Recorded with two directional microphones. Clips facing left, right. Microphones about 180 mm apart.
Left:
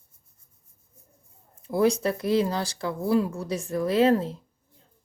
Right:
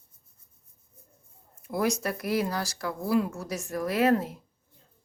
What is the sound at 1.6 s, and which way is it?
A man's voice, 30° left (ahead or behind).